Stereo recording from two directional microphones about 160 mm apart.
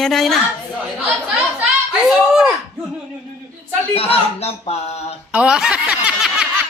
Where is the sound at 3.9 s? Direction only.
40° left (ahead or behind).